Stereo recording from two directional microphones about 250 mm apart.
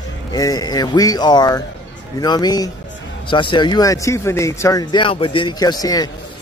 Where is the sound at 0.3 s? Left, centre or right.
Centre.